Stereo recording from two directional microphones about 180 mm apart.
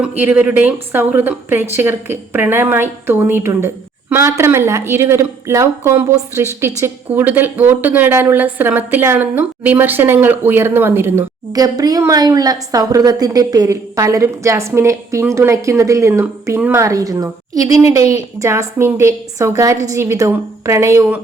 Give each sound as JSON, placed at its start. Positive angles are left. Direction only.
{"t": 0.0, "sound": "a woman's voice", "side_deg": -10}